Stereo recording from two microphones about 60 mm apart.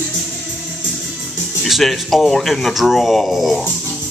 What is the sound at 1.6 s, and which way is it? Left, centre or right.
Speech, centre.